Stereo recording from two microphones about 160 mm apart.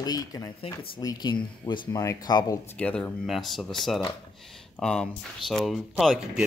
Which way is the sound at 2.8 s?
10° left (ahead or behind).